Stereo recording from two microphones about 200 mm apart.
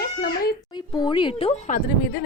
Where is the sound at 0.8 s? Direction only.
20° left (ahead or behind).